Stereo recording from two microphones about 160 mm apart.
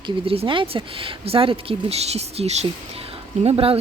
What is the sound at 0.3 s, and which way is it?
Speech, 35° right (ahead or behind).